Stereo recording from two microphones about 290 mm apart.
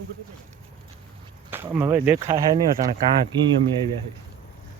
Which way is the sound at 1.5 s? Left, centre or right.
Centre.